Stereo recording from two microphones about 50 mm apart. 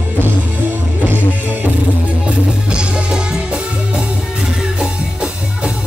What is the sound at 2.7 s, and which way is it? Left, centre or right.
Music, centre.